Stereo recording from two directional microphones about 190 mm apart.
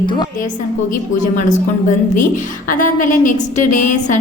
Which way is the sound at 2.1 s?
45° left (ahead or behind).